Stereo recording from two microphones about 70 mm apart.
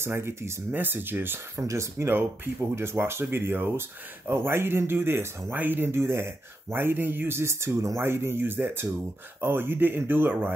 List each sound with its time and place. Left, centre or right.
0.0 s speech: right
1.6 s speech: right